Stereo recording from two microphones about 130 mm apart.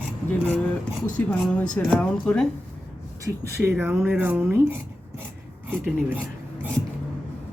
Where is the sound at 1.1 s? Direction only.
10° left (ahead or behind).